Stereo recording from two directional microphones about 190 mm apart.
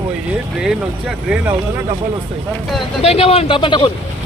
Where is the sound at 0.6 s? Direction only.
5° right (ahead or behind).